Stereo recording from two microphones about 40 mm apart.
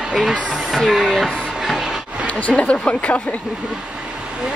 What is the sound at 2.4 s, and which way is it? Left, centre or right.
Speech, left.